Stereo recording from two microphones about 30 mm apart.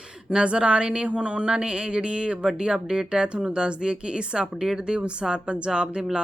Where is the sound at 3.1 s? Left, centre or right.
Right.